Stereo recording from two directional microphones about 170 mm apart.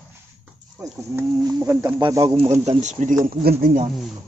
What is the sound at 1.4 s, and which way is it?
Speech, 25° right (ahead or behind).